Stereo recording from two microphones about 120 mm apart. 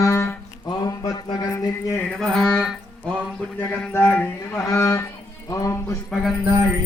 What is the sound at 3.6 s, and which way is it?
Speech, 15° left (ahead or behind).